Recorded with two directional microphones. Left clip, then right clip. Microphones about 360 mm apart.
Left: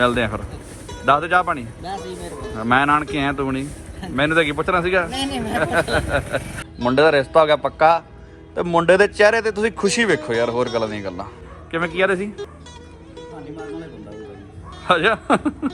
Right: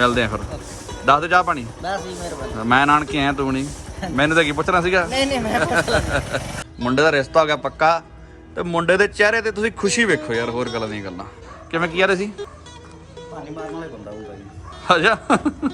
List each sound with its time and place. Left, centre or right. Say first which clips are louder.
0.0 s a man's voice: right 1 dB; centre
14.8 s a man's voice: right 1 dB; centre